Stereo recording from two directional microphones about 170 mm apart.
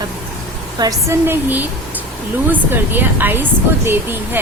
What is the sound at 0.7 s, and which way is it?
A woman's voice, 20° right (ahead or behind).